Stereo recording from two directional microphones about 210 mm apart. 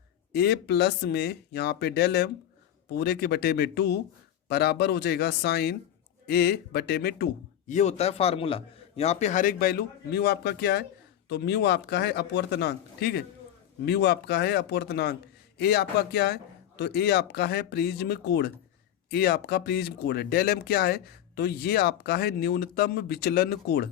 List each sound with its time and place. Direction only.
0.3 s speech: 50° left (ahead or behind)
7.7 s a man's voice: 35° left (ahead or behind); by 23.9 s 50° left (ahead or behind)